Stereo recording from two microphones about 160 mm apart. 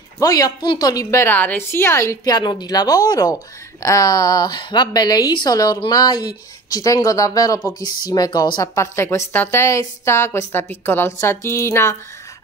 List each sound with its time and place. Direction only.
0.2 s a woman's voice: 20° left (ahead or behind)